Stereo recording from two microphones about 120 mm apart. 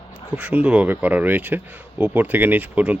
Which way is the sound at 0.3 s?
10° right (ahead or behind).